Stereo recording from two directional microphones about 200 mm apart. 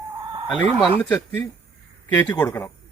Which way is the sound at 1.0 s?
5° left (ahead or behind).